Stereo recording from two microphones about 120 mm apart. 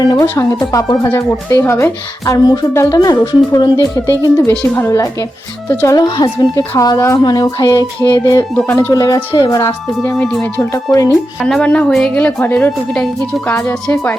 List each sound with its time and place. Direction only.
0.0 s speech: 30° left (ahead or behind)
1.0 s a woman's voice: 20° left (ahead or behind)
6.0 s speech: 35° left (ahead or behind)
8.2 s a woman's voice: 25° left (ahead or behind)
8.9 s speech: 30° left (ahead or behind)
10.0 s a woman's voice: 10° left (ahead or behind)
10.6 s speech: 25° left (ahead or behind)
11.4 s a woman's voice: 5° left (ahead or behind)